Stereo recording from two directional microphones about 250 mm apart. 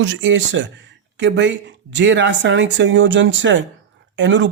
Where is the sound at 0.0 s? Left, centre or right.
Right.